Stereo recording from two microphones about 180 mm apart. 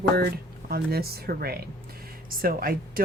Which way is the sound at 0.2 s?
60° right (ahead or behind).